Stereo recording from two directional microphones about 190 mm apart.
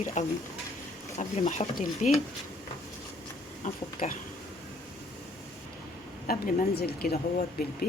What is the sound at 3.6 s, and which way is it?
Speech, 40° left (ahead or behind).